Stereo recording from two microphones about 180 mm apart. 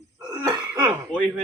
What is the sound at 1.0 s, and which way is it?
Speech, 5° left (ahead or behind).